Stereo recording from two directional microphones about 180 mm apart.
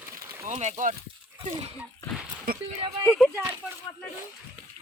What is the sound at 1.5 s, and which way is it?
Speech, 30° right (ahead or behind).